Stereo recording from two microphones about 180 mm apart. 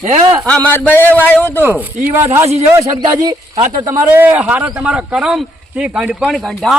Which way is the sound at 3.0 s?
20° right (ahead or behind).